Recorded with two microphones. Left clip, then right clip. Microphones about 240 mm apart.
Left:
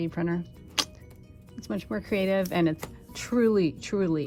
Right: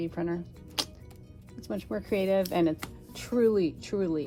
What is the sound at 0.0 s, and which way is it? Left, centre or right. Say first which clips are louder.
Speech: left 2 dB; left.